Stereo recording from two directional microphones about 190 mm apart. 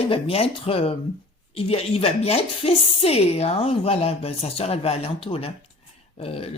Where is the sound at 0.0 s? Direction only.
30° left (ahead or behind).